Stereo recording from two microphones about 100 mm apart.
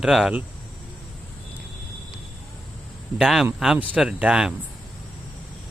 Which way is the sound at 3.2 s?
5° right (ahead or behind).